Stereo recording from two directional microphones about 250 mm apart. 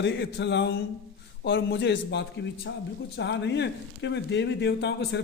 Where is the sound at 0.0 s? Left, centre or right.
Left.